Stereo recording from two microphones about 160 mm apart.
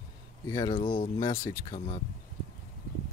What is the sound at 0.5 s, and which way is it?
Speech, 25° left (ahead or behind).